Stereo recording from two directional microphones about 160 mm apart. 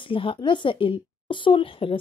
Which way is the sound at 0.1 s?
35° left (ahead or behind).